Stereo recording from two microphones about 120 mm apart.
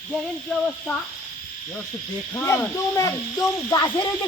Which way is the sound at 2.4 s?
25° left (ahead or behind).